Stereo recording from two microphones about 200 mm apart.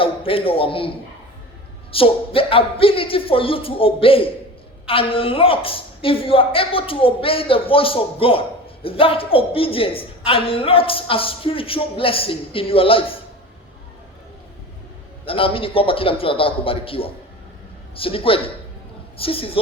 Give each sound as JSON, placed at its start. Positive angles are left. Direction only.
{"t": 0.0, "sound": "a man's voice", "side_deg": 25}
{"t": 1.9, "sound": "a woman's voice", "side_deg": 25}
{"t": 15.2, "sound": "a woman's voice", "side_deg": 25}